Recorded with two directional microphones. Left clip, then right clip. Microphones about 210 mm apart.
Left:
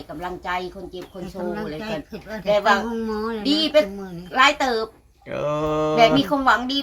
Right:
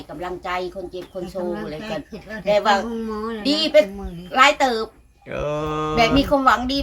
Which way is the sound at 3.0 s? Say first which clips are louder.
Left 1 dB; 20° left (ahead or behind).